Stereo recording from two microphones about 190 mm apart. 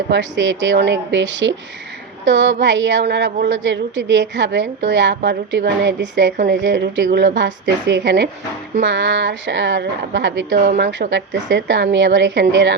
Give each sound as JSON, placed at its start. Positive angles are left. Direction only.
{"t": 0.1, "sound": "a woman's voice", "side_deg": -70}
{"t": 6.3, "sound": "a woman's voice", "side_deg": -55}
{"t": 11.1, "sound": "a woman's voice", "side_deg": -65}